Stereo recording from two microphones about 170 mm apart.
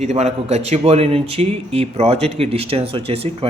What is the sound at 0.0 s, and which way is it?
A man's voice, 40° right (ahead or behind).